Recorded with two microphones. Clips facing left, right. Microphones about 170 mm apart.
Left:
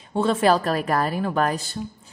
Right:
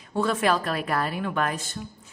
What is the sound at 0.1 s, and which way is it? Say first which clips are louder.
A woman's voice: left 4 dB; 25° left (ahead or behind).